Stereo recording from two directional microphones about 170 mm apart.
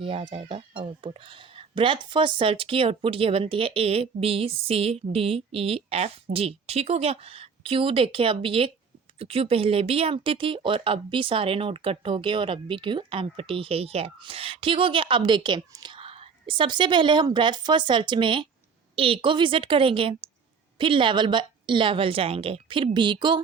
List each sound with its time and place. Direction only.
0.0 s a woman's voice: 30° right (ahead or behind)